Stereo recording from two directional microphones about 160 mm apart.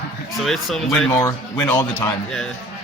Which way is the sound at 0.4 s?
Centre (ahead or behind).